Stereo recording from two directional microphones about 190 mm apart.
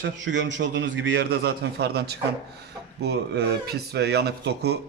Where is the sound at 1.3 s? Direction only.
60° right (ahead or behind).